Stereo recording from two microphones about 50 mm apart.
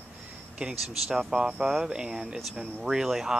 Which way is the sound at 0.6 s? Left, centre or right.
Centre.